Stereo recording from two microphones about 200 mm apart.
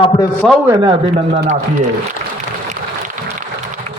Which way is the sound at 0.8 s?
25° right (ahead or behind).